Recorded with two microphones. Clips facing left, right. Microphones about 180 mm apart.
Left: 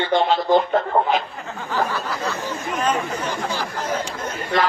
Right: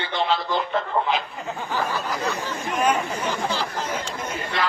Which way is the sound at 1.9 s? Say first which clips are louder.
Even; 15° right (ahead or behind).